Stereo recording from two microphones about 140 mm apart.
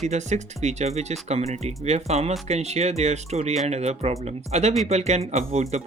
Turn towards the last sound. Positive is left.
turn(degrees=-50)  # may be behind; listen again after turning